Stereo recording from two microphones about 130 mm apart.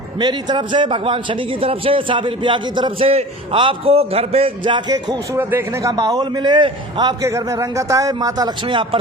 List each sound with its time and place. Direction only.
0.2 s a man's voice: 35° right (ahead or behind)
5.3 s speech: 20° right (ahead or behind)
5.9 s a man's voice: 30° right (ahead or behind)
7.3 s speech: 20° right (ahead or behind)
8.6 s a man's voice: 40° right (ahead or behind)